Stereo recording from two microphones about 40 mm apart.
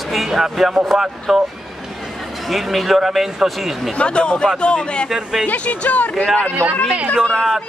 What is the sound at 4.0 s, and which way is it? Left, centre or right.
Speech, left.